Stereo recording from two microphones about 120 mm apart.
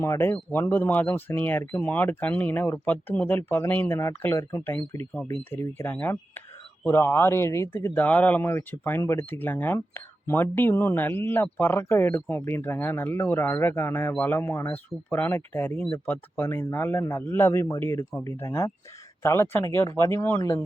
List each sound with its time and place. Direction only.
0.0 s speech: 20° left (ahead or behind)